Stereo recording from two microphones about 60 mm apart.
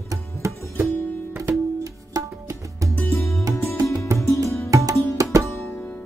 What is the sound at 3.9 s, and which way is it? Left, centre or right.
Music, right.